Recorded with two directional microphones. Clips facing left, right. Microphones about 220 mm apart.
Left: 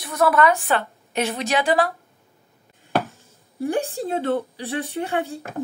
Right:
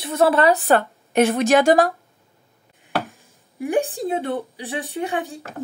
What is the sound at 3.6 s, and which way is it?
Speech, 15° right (ahead or behind).